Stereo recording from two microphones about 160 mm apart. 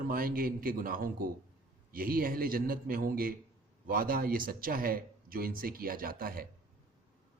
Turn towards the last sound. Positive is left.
turn(degrees=-65)  # may be behind; listen again after turning